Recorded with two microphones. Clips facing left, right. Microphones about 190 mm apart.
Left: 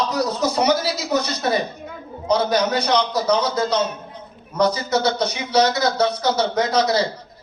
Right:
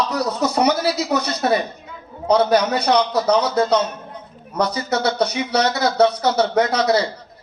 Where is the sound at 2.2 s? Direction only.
60° right (ahead or behind).